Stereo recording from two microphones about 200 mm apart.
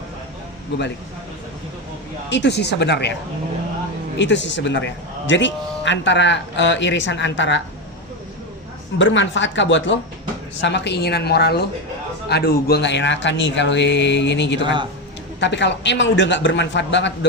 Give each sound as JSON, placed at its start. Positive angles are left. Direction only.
{"t": 2.3, "sound": "a man's voice", "side_deg": 60}
{"t": 4.2, "sound": "a man's voice", "side_deg": 65}
{"t": 9.0, "sound": "a man's voice", "side_deg": 65}